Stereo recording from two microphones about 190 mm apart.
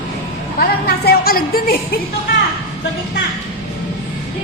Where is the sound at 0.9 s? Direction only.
55° left (ahead or behind).